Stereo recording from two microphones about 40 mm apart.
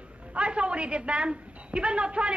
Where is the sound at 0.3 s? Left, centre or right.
Right.